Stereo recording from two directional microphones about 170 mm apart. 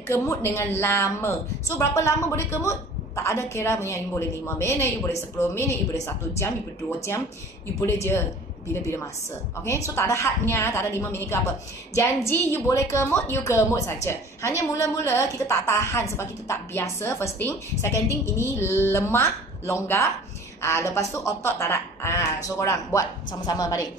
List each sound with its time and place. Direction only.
0.1 s a woman's voice: 15° left (ahead or behind)
7.8 s a woman's voice: 15° left (ahead or behind)
9.8 s a woman's voice: 15° left (ahead or behind)